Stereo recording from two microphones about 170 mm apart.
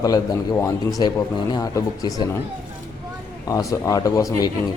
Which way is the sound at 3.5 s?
20° left (ahead or behind).